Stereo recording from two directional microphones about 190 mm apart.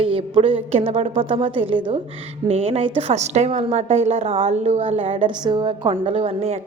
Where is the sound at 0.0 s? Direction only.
30° right (ahead or behind).